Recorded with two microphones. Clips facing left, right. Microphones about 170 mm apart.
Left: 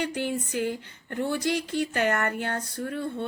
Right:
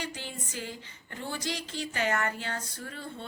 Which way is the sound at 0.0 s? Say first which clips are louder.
Left 10 dB; 55° left (ahead or behind).